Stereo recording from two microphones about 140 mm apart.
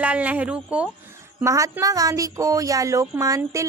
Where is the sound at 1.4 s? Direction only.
20° right (ahead or behind).